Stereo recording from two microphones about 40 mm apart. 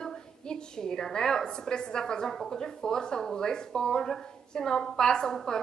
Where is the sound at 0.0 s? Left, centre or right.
Centre.